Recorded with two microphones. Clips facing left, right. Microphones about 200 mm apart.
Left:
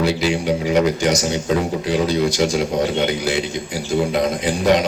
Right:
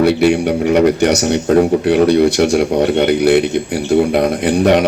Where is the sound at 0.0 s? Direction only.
60° right (ahead or behind).